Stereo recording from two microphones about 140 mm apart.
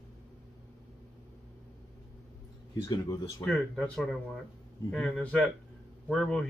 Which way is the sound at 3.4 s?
5° left (ahead or behind).